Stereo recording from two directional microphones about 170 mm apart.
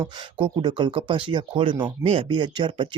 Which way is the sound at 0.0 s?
30° right (ahead or behind).